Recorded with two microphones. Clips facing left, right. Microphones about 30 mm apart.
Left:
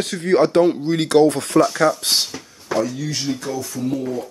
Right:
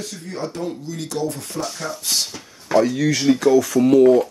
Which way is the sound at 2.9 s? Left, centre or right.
Right.